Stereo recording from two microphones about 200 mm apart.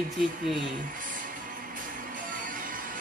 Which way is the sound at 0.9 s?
40° right (ahead or behind).